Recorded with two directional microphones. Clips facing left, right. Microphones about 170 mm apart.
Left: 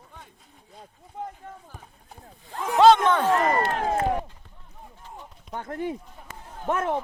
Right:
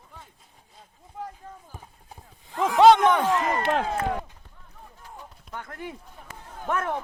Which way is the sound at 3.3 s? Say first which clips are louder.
Left 3 dB; 35° left (ahead or behind).